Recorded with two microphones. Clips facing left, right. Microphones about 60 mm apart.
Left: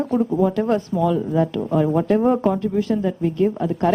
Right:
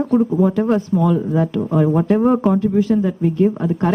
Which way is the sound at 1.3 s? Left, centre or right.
Centre.